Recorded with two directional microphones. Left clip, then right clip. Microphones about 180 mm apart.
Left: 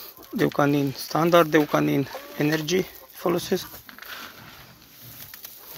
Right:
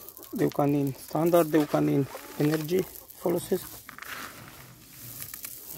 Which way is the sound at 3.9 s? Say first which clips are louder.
Left 1 dB; 35° right (ahead or behind).